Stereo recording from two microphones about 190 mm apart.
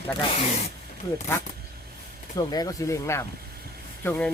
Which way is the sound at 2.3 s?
20° left (ahead or behind).